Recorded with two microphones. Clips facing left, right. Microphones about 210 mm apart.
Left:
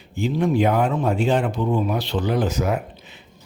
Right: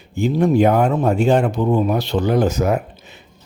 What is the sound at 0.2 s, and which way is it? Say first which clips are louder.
Speech: right 5 dB; 45° right (ahead or behind).